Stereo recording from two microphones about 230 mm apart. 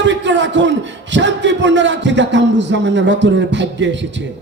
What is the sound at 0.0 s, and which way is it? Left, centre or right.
Speech, right.